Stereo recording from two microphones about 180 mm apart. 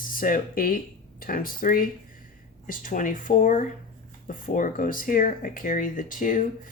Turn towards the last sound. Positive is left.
turn(degrees=45)  # may be behind; listen again after turning